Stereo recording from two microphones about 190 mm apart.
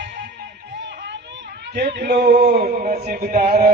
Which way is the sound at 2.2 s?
50° right (ahead or behind).